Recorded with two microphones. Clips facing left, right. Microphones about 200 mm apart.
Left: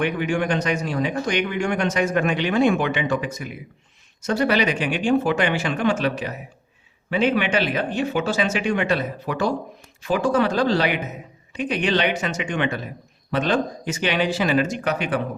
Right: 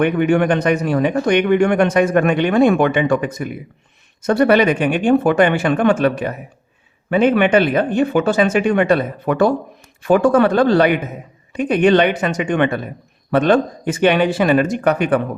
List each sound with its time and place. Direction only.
0.0 s speech: 55° right (ahead or behind)